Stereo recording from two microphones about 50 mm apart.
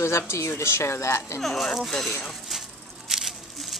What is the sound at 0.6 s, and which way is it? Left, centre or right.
Speech, left.